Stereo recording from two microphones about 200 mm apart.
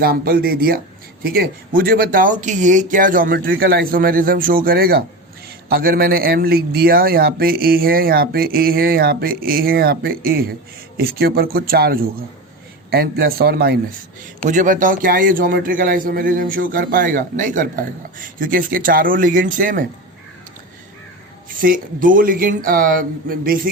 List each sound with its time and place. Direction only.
0.0 s a man's voice: 50° right (ahead or behind)
14.4 s a man's voice: 40° right (ahead or behind)
21.6 s a man's voice: 45° right (ahead or behind)